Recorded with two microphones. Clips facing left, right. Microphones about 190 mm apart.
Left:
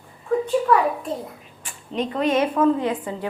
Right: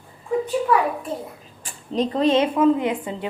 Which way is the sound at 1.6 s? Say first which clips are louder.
Right 3 dB; 35° right (ahead or behind).